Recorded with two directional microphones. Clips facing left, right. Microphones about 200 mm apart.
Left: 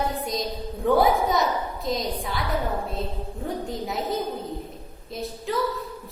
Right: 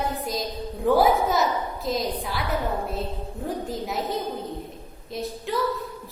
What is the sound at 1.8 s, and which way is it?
Speech, centre (ahead or behind).